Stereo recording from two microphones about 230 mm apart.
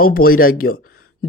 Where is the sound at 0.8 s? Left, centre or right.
Left.